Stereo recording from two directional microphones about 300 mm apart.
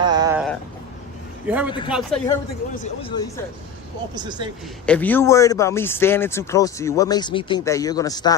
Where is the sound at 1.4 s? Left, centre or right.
Centre.